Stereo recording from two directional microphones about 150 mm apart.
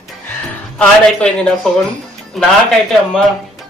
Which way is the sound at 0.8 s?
5° left (ahead or behind).